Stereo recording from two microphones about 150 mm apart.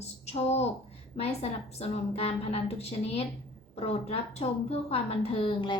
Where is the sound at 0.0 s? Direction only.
45° left (ahead or behind).